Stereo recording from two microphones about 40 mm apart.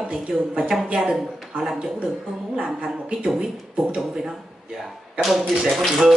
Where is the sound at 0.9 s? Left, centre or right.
Centre.